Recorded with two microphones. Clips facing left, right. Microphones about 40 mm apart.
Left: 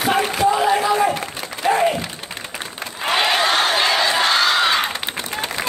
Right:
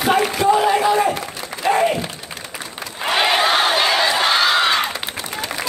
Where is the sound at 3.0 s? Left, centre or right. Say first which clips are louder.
Right 1 dB; centre.